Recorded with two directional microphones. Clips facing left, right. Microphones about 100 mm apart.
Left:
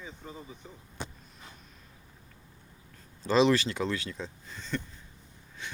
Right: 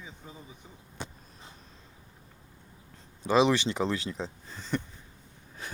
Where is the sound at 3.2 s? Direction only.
15° right (ahead or behind); by 4.8 s 30° right (ahead or behind).